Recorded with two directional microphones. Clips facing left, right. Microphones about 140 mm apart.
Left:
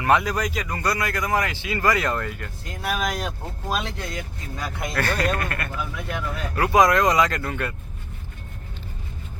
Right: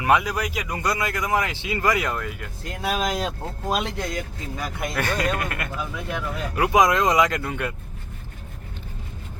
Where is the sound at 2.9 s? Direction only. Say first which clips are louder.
Right 2 dB; 20° right (ahead or behind).